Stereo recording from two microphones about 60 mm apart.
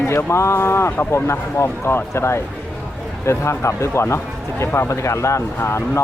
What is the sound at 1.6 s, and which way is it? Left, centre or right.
Speech, left.